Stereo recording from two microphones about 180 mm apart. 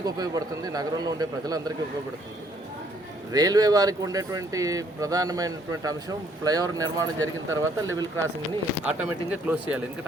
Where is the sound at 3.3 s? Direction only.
20° right (ahead or behind).